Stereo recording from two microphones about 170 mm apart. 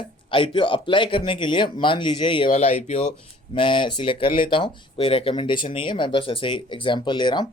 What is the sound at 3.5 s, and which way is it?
Speech, 30° left (ahead or behind).